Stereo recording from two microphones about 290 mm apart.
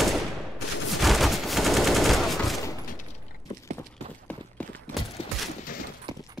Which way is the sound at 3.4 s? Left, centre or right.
Centre.